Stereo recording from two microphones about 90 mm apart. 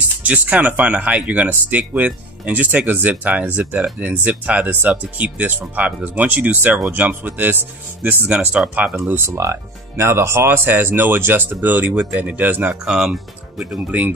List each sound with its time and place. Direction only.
0.2 s speech: 15° right (ahead or behind)
12.8 s speech: 5° right (ahead or behind)